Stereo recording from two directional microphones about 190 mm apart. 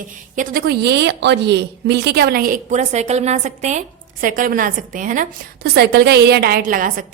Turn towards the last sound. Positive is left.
turn(degrees=-45)  # may be behind; listen again after turning